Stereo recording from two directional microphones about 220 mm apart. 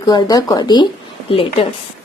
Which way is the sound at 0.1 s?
15° left (ahead or behind).